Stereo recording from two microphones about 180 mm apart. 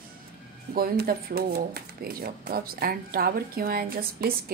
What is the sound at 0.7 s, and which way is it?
A woman's voice, 55° right (ahead or behind).